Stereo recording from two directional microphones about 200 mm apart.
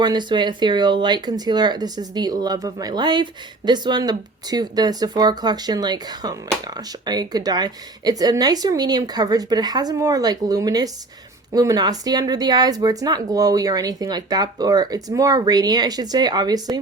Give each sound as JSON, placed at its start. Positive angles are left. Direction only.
{"t": 0.0, "sound": "speech", "side_deg": -20}